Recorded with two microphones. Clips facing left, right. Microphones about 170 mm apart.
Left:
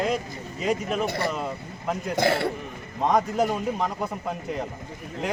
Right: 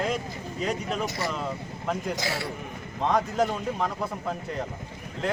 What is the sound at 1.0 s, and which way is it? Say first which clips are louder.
Speech: left 4 dB; 60° left (ahead or behind).